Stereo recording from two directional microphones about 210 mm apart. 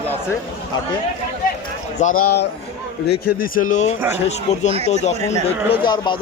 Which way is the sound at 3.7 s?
35° left (ahead or behind).